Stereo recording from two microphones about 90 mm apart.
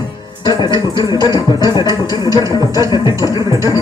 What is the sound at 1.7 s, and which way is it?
Music, 45° left (ahead or behind).